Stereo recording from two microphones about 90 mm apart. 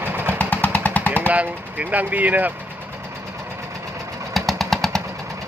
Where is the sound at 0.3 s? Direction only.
15° left (ahead or behind).